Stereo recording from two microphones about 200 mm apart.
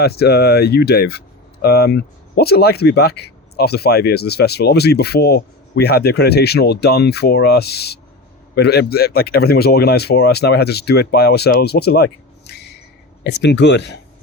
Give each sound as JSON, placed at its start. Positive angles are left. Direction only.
{"t": 0.0, "sound": "speech", "side_deg": 50}